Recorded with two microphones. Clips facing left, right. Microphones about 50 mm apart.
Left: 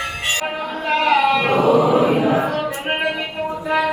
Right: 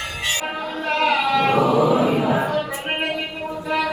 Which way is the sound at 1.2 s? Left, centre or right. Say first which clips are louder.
Left 2 dB; left.